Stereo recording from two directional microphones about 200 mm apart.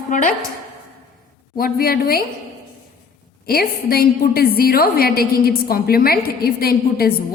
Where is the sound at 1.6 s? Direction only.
45° left (ahead or behind).